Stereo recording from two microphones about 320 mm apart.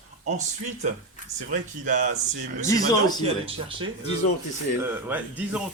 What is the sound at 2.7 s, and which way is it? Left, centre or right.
Speech, centre.